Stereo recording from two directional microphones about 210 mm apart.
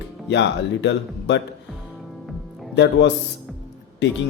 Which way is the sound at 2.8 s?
55° left (ahead or behind).